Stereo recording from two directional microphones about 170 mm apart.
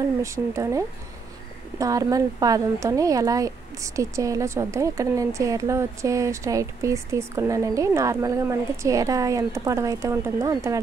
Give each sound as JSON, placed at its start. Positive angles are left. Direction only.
{"t": 0.2, "sound": "speech", "side_deg": -20}